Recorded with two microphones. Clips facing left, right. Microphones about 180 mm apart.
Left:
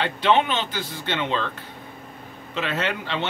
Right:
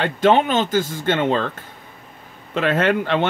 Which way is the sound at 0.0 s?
45° right (ahead or behind).